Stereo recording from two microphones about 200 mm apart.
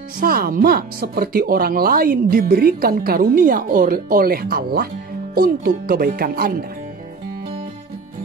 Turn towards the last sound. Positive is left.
turn(degrees=-45)  # may be behind; listen again after turning